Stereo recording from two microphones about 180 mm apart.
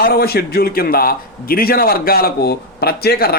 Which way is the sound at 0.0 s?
60° left (ahead or behind).